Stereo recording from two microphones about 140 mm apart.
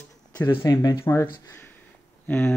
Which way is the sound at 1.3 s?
25° left (ahead or behind).